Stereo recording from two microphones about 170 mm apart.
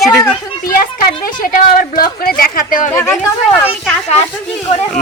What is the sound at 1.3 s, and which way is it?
Speech, 50° left (ahead or behind).